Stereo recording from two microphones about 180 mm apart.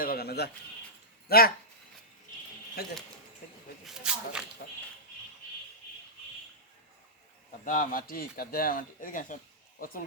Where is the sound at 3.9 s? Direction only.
5° right (ahead or behind).